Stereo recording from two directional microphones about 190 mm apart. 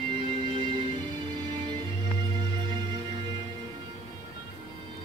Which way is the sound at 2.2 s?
25° right (ahead or behind).